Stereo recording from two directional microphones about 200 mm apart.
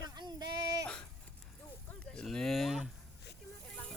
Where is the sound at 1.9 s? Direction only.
5° left (ahead or behind).